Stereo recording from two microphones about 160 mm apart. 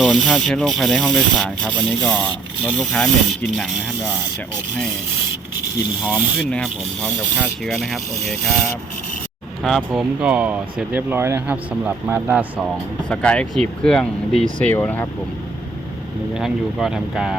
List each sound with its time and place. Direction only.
0.0 s rub: centre (ahead or behind)
5.5 s speech: 10° right (ahead or behind)
6.5 s rub: 5° left (ahead or behind)
9.6 s speech: centre (ahead or behind)
13.1 s rub: 5° left (ahead or behind)
16.3 s rub: centre (ahead or behind)